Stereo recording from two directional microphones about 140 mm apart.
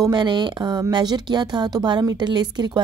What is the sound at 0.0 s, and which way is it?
A woman's voice, 30° right (ahead or behind).